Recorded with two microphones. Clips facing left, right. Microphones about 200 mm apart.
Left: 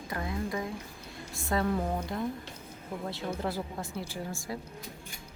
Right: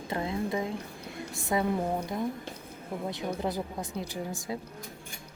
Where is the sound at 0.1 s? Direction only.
25° right (ahead or behind).